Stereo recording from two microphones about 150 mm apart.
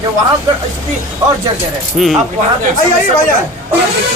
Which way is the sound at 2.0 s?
Centre (ahead or behind).